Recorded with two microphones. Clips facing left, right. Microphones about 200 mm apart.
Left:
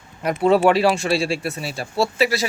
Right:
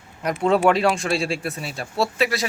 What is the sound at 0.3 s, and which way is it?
Speech, 5° left (ahead or behind).